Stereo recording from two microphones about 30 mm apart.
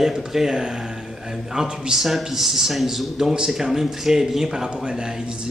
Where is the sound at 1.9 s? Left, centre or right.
Centre.